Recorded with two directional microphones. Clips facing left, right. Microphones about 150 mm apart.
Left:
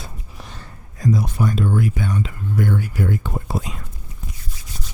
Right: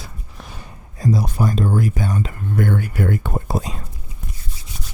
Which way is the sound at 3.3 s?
40° right (ahead or behind).